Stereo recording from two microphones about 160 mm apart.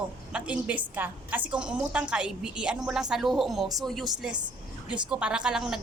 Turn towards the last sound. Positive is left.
turn(degrees=-5)  # may be behind; listen again after turning